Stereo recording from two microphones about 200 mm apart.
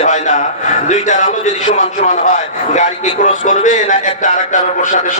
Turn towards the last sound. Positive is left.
turn(degrees=40)  # may be behind; listen again after turning